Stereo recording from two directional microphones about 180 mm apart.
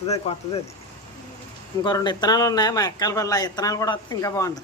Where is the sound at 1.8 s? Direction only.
25° left (ahead or behind).